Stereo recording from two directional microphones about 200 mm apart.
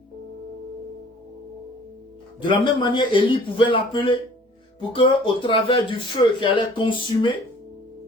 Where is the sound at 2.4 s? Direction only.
25° left (ahead or behind).